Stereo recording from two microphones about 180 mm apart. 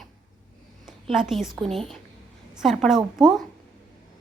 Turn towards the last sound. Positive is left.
turn(degrees=0)  # may be behind; listen again after turning